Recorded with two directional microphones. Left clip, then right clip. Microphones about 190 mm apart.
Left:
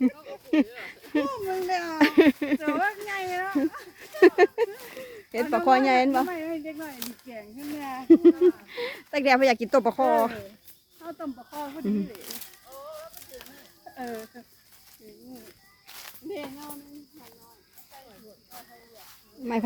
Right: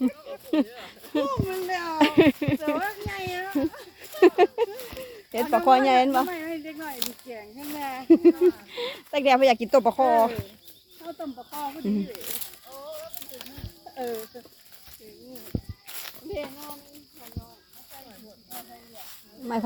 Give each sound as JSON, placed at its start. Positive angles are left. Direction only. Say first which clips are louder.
{"t": 0.3, "sound": "a sound", "louder": "left 1 dB", "side_deg": 20}
{"t": 11.7, "sound": "snake", "louder": "left 2 dB", "side_deg": 10}
{"t": 15.4, "sound": "walk", "louder": "right 11 dB", "side_deg": -60}
{"t": 18.5, "sound": "snake", "louder": "right 6 dB", "side_deg": -55}